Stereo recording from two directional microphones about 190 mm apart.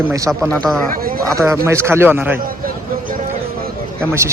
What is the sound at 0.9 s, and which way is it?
Speech, 50° right (ahead or behind).